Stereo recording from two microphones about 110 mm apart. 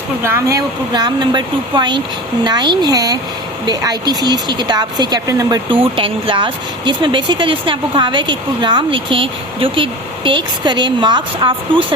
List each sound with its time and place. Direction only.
0.2 s speech: 25° right (ahead or behind)
5.6 s speech: 50° right (ahead or behind)